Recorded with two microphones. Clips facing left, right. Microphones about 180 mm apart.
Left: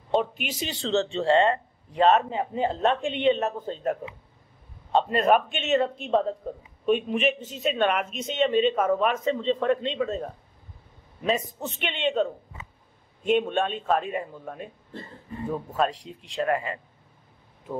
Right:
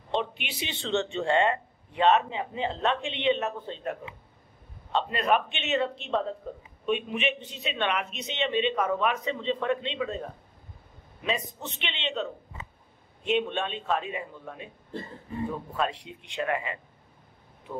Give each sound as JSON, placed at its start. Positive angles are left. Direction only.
{"t": 0.2, "sound": "speech", "side_deg": 45}
{"t": 6.9, "sound": "speech", "side_deg": 40}
{"t": 11.2, "sound": "speech", "side_deg": 45}
{"t": 15.7, "sound": "speech", "side_deg": 40}